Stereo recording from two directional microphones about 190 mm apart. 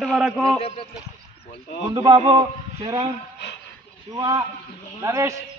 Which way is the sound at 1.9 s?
20° right (ahead or behind).